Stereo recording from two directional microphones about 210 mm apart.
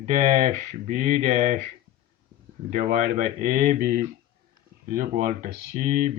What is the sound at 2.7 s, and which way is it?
Speech, 40° right (ahead or behind).